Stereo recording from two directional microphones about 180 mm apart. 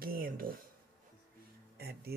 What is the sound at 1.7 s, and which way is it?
Speech, 60° right (ahead or behind).